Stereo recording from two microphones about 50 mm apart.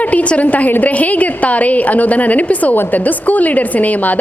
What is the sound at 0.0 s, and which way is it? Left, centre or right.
A woman's voice, left.